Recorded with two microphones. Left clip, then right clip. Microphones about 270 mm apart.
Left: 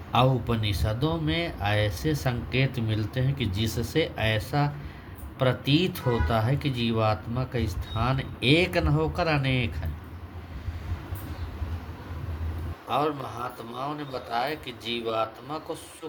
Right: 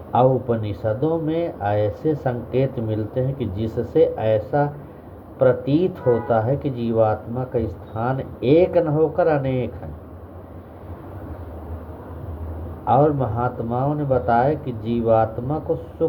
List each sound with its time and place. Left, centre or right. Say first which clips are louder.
0.1 s speech: right 7 dB; left
12.9 s speech: right 10 dB; left